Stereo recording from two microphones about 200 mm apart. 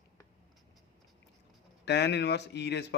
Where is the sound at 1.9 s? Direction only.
60° left (ahead or behind).